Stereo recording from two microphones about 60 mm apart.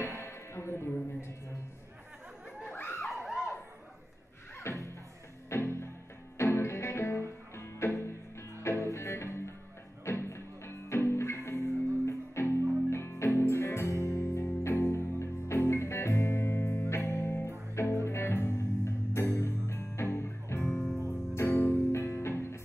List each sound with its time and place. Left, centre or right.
0.0 s music: left
2.7 s dog: left
3.1 s a sound: centre
4.6 s music: left